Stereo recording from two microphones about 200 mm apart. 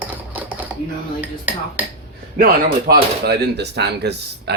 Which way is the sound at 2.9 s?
55° right (ahead or behind).